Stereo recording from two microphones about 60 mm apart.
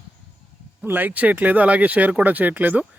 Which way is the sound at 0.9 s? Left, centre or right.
Right.